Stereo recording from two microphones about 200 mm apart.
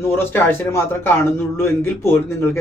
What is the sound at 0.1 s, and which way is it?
Speech, 10° left (ahead or behind).